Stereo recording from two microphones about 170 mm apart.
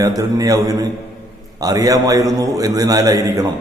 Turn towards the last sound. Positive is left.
turn(degrees=-20)  # may be behind; listen again after turning